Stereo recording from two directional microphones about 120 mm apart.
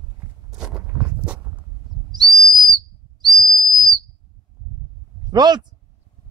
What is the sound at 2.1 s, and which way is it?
Whistle, 35° right (ahead or behind).